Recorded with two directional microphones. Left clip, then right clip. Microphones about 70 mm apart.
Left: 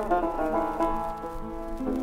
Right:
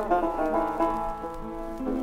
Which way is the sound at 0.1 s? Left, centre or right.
Right.